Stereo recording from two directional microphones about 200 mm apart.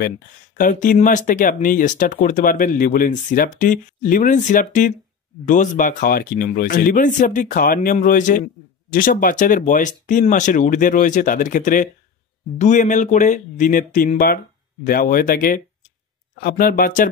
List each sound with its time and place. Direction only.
0.6 s speech: 40° left (ahead or behind)